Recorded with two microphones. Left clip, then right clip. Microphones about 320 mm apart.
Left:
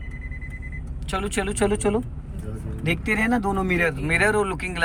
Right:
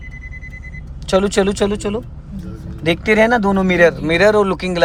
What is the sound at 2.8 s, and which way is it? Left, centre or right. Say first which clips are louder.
Speech: right 10 dB; centre.